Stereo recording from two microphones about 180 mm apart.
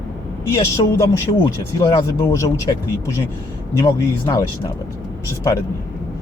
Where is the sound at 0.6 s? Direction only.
15° left (ahead or behind).